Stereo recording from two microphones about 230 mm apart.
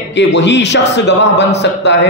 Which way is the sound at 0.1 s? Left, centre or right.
Left.